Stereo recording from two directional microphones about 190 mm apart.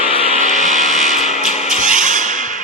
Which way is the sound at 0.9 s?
Centre (ahead or behind).